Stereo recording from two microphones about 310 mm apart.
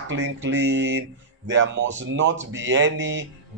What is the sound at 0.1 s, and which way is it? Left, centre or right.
Speech, right.